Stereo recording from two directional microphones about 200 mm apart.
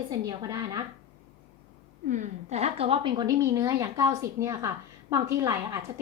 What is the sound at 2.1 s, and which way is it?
A woman's voice, 35° right (ahead or behind).